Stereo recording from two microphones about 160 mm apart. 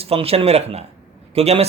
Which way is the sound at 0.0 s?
40° right (ahead or behind).